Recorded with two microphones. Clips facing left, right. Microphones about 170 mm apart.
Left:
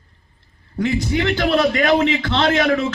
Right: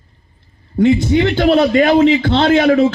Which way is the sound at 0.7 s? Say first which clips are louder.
Right 8 dB; 25° right (ahead or behind).